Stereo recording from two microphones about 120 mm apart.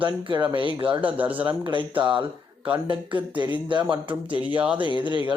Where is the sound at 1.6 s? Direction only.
45° right (ahead or behind).